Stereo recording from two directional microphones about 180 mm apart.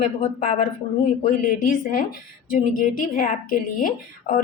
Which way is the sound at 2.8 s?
50° left (ahead or behind).